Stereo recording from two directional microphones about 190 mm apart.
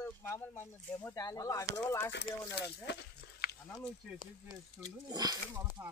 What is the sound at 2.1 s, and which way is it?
Speech, 65° left (ahead or behind).